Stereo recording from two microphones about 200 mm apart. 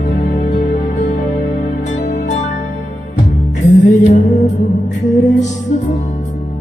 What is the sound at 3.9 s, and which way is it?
Music, 40° left (ahead or behind).